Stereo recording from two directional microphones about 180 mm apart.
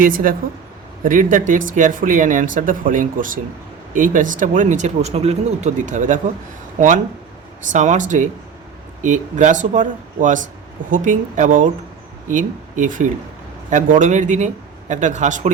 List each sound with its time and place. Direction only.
0.0 s speech: 50° right (ahead or behind)